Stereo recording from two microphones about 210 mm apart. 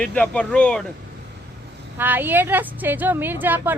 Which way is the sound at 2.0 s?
10° right (ahead or behind).